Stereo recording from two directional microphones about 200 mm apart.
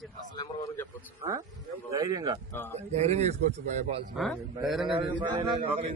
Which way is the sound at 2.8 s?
35° right (ahead or behind).